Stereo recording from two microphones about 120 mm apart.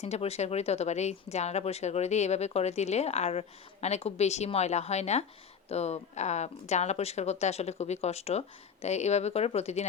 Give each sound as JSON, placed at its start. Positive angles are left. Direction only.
{"t": 0.0, "sound": "a woman's voice", "side_deg": 60}